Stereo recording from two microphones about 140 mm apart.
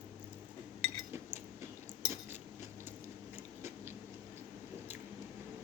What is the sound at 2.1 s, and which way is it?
Cutlery, 15° right (ahead or behind).